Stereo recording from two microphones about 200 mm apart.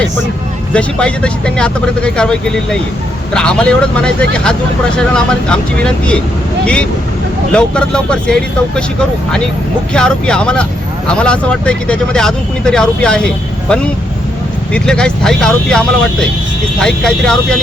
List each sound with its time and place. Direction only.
0.7 s speech: 5° left (ahead or behind)
7.5 s speech: 5° left (ahead or behind)
9.9 s speech: 5° left (ahead or behind)